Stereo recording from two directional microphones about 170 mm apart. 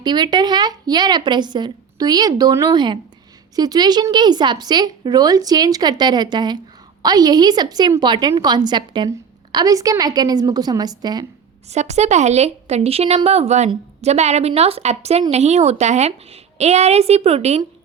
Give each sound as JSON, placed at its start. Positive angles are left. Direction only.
{"t": 0.0, "sound": "a woman's voice", "side_deg": -25}
{"t": 11.7, "sound": "a woman's voice", "side_deg": -40}